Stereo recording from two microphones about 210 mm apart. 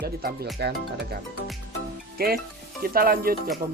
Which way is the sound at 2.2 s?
45° right (ahead or behind).